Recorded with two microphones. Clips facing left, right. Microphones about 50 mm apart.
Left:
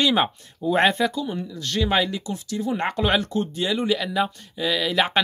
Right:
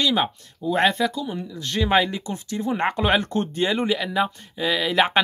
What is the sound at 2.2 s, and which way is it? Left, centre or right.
Speech, right.